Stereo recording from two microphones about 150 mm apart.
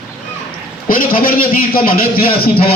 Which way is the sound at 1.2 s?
75° left (ahead or behind).